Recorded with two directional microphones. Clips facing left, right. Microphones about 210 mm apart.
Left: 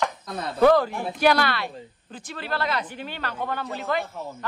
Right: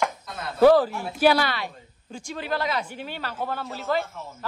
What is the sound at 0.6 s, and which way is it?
A woman's voice, 5° right (ahead or behind).